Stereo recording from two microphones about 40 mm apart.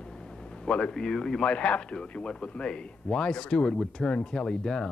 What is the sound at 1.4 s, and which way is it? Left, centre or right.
Speech, left.